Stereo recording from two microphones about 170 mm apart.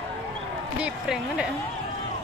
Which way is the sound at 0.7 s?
5° right (ahead or behind).